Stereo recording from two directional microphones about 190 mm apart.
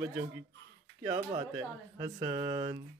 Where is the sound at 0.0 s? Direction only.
10° right (ahead or behind).